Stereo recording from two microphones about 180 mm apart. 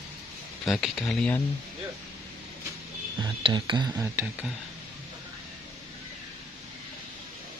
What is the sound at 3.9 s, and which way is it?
Speech, 10° right (ahead or behind).